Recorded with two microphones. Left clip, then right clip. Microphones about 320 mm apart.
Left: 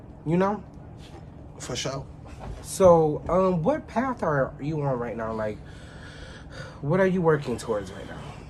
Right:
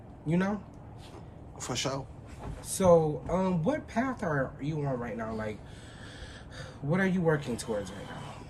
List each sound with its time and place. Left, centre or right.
0.3 s speech: centre
1.6 s a man's voice: centre
2.6 s speech: centre
6.6 s speech: centre
8.0 s a sound: centre